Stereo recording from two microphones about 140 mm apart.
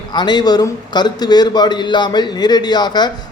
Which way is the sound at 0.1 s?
30° left (ahead or behind).